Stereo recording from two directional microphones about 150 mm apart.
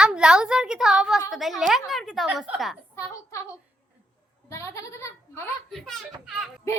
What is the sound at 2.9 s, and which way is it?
Speech, 20° left (ahead or behind).